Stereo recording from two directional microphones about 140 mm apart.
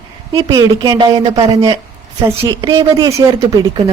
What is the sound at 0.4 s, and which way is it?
A woman's voice, 35° right (ahead or behind).